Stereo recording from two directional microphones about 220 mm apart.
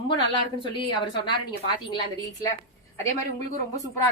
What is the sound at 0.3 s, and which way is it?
Speech, 20° left (ahead or behind).